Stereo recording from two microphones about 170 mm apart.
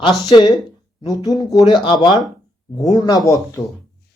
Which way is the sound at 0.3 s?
30° left (ahead or behind).